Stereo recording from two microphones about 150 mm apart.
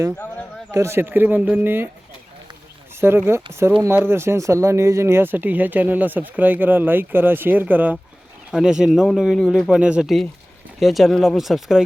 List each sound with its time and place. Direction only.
0.7 s speech: 20° right (ahead or behind)
3.0 s a man's voice: 15° right (ahead or behind)